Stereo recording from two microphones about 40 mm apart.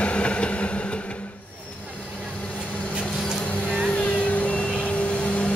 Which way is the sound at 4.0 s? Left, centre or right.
Left.